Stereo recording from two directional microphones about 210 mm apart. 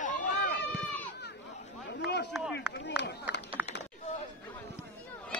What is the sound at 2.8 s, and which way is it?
Run, 55° left (ahead or behind).